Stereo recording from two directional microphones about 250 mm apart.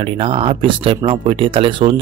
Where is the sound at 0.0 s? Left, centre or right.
Right.